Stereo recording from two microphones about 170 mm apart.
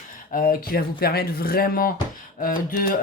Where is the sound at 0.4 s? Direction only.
60° left (ahead or behind).